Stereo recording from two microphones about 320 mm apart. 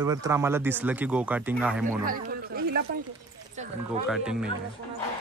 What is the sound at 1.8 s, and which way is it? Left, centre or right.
Speech, right.